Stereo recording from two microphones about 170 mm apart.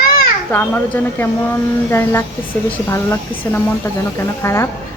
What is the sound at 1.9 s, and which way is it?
A woman's voice, 15° left (ahead or behind).